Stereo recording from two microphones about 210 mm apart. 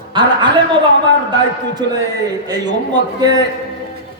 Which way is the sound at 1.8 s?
20° right (ahead or behind).